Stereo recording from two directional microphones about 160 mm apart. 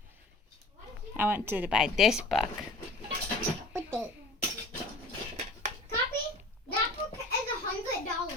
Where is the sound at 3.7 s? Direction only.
15° right (ahead or behind).